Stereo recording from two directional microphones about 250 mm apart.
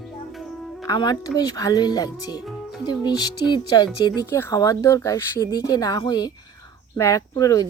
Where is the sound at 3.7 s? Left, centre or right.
Centre.